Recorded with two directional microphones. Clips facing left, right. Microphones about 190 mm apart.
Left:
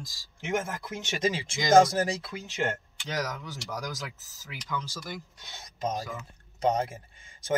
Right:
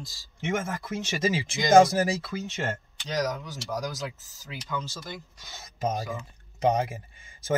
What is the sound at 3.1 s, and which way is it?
Speech, 20° right (ahead or behind).